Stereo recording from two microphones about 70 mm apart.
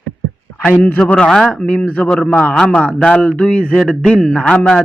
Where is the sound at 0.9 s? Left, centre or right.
Centre.